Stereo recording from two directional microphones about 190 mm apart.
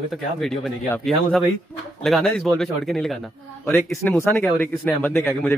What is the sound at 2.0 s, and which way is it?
Speech, centre (ahead or behind).